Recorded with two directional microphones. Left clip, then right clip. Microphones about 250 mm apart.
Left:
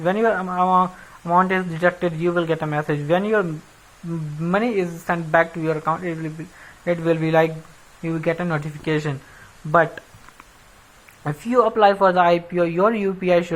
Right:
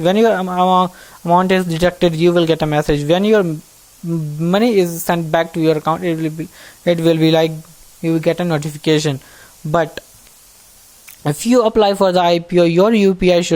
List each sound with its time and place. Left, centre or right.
0.0 s speech: right
11.2 s speech: right